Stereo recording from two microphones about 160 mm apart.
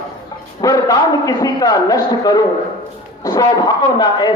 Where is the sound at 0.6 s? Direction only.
20° left (ahead or behind).